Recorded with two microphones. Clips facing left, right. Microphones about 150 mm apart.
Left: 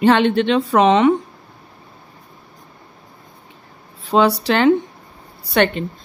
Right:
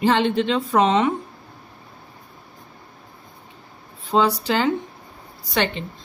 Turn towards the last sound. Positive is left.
turn(degrees=60)  # may be behind; listen again after turning